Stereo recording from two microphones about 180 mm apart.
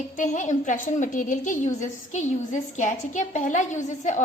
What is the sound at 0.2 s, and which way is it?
A woman's voice, 45° left (ahead or behind).